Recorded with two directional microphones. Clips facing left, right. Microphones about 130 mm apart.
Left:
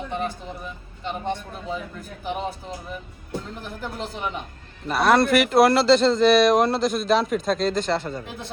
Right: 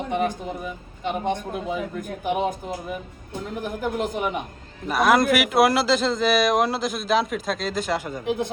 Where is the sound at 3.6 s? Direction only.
50° right (ahead or behind).